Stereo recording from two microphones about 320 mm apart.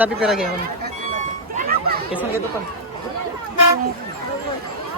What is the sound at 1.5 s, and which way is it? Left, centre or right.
Music, right.